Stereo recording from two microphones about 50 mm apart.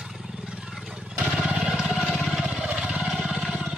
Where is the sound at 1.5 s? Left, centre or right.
Centre.